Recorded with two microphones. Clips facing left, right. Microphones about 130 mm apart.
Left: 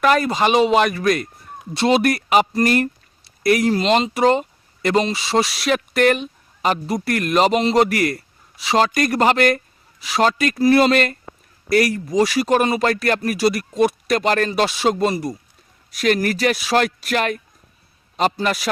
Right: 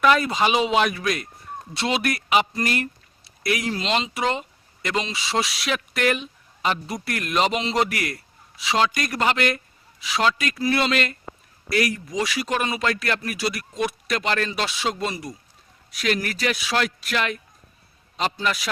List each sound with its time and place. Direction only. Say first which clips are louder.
0.0 s speech: left 2 dB; 45° left (ahead or behind)
0.8 s speech: left 5 dB; centre (ahead or behind)
1.9 s speech: left 6 dB; 45° left (ahead or behind)
7.0 s speech: left 8 dB; centre (ahead or behind)
7.3 s speech: left 6 dB; 45° left (ahead or behind)